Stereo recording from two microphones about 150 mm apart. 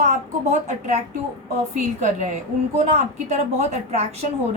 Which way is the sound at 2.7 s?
50° right (ahead or behind).